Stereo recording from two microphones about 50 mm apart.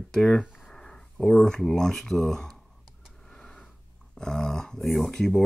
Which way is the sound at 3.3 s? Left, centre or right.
Centre.